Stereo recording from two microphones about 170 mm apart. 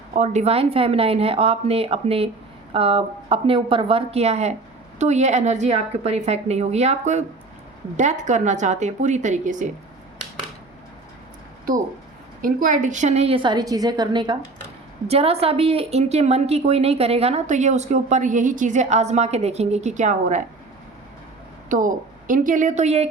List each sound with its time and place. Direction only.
0.1 s a woman's voice: 45° right (ahead or behind)
12.4 s a woman's voice: 55° right (ahead or behind)
21.7 s speech: 50° right (ahead or behind)